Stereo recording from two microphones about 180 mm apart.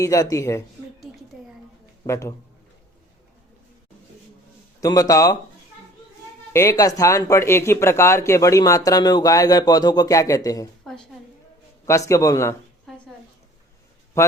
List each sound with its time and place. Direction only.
0.0 s a man's voice: 20° left (ahead or behind)
1.1 s a sound: 5° right (ahead or behind)
2.0 s a man's voice: 15° left (ahead or behind)
4.8 s speech: 20° left (ahead or behind)
6.5 s speech: 15° left (ahead or behind)
11.9 s a man's voice: 15° left (ahead or behind)
12.9 s a sound: centre (ahead or behind)
14.2 s speech: 15° left (ahead or behind)